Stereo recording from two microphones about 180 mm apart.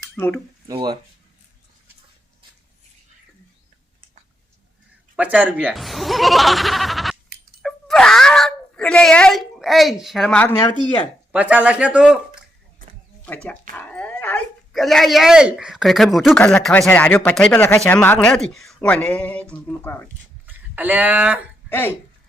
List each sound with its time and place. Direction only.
0.7 s speech: 25° right (ahead or behind)
5.1 s speech: 5° right (ahead or behind)
7.6 s wail: centre (ahead or behind)
11.3 s speech: 5° right (ahead or behind)
12.8 s a sound: 50° right (ahead or behind)
13.2 s speech: 10° left (ahead or behind)
20.5 s speech: 10° right (ahead or behind)
21.7 s speech: 10° left (ahead or behind)